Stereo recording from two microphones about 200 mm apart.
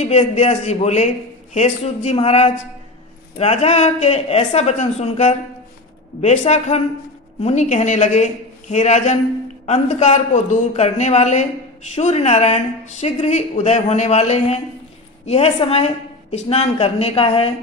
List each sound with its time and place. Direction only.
0.0 s a woman's voice: 30° left (ahead or behind)